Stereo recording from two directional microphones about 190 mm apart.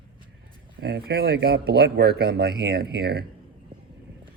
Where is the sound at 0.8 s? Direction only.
60° right (ahead or behind).